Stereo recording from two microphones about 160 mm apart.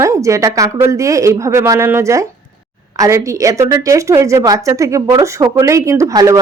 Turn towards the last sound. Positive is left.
turn(degrees=-20)  # may be behind; listen again after turning